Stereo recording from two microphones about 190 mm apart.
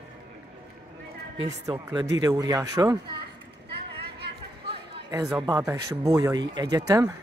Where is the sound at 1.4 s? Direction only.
20° right (ahead or behind).